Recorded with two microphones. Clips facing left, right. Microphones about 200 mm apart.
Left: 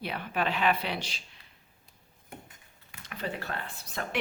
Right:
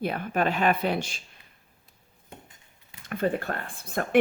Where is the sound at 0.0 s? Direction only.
45° right (ahead or behind).